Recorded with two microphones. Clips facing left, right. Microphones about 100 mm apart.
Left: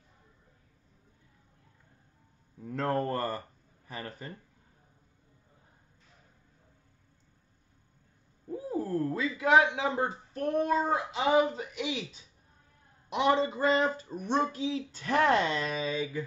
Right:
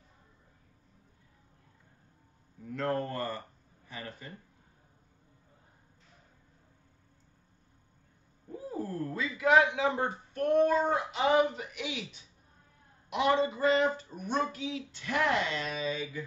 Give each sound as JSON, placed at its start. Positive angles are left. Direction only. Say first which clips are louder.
{"t": 2.7, "sound": "speech", "louder": "left 2 dB", "side_deg": 35}
{"t": 8.9, "sound": "speech", "louder": "left 5 dB", "side_deg": 30}